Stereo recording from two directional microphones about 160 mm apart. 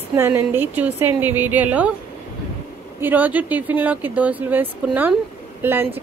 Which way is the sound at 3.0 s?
10° right (ahead or behind).